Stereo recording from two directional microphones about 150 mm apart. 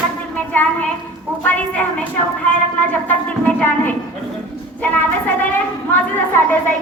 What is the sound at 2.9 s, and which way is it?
A woman's voice, 10° left (ahead or behind).